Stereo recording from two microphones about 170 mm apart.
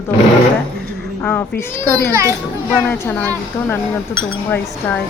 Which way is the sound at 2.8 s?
15° left (ahead or behind).